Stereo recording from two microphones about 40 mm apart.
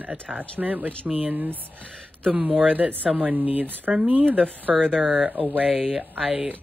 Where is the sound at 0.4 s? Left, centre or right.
Right.